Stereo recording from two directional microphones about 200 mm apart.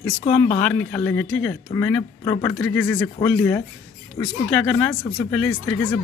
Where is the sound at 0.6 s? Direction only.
5° left (ahead or behind).